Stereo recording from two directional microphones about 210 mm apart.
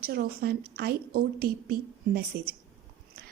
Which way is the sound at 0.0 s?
45° right (ahead or behind).